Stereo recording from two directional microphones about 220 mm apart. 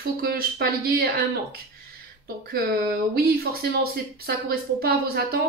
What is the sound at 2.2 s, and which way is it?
Speech, 40° right (ahead or behind).